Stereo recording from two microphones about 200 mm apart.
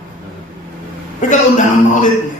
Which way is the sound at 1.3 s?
40° left (ahead or behind).